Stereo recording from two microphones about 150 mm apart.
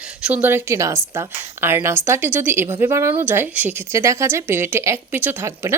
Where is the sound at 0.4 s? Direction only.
15° right (ahead or behind).